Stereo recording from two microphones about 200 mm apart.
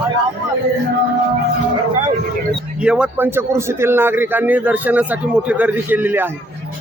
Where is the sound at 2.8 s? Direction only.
5° right (ahead or behind).